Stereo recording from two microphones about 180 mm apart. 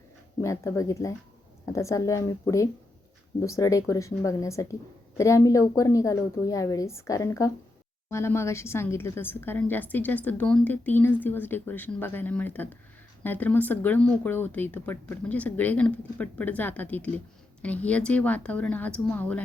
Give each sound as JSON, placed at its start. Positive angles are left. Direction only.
{"t": 0.4, "sound": "a woman's voice", "side_deg": 15}